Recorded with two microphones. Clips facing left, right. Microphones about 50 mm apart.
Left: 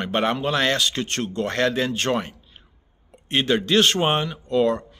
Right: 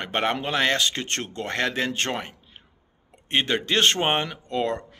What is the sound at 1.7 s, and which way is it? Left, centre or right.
Speech, right.